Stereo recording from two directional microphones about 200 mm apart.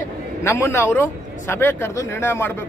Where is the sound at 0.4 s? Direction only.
15° left (ahead or behind).